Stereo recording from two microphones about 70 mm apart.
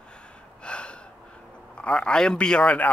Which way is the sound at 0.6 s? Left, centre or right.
Centre.